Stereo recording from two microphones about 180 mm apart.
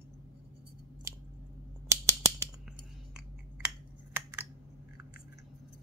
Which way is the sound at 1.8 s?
15° right (ahead or behind).